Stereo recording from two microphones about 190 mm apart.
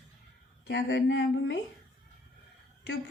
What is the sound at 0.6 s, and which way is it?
Speech, 60° left (ahead or behind).